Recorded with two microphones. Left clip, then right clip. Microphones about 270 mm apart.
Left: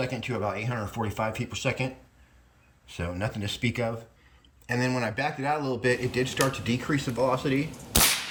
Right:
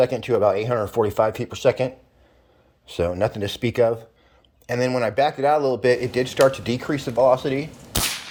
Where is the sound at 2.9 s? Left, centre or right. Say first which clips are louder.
Right 11 dB; right.